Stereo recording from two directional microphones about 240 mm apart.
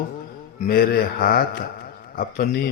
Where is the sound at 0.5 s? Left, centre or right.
Left.